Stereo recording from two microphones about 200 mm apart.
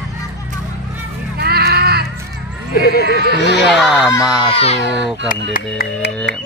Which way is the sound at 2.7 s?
50° left (ahead or behind).